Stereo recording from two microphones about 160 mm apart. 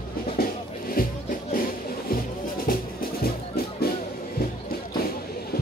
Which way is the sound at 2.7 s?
65° left (ahead or behind).